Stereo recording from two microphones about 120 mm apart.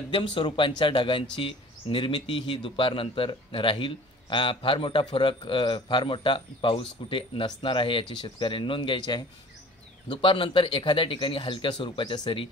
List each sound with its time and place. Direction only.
0.1 s speech: 45° left (ahead or behind)